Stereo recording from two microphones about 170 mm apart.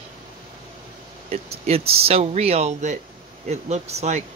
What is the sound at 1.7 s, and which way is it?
Speech, 35° right (ahead or behind).